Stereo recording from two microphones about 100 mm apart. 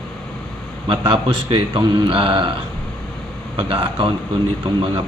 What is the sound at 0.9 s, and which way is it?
Speech, 60° right (ahead or behind).